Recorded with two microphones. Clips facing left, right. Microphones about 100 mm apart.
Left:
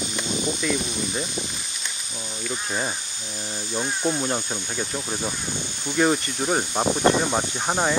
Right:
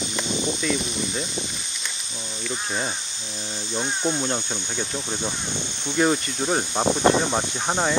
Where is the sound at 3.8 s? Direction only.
5° left (ahead or behind).